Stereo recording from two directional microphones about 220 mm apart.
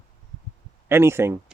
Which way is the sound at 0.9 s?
10° right (ahead or behind).